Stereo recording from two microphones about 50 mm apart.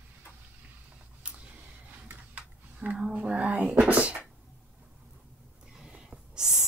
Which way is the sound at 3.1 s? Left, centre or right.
Right.